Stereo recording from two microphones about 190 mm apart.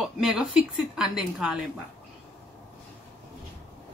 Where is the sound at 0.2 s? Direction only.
Centre (ahead or behind).